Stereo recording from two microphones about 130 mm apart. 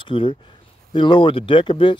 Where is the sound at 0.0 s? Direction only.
40° left (ahead or behind).